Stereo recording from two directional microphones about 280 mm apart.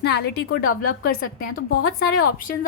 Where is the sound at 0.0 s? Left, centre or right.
Left.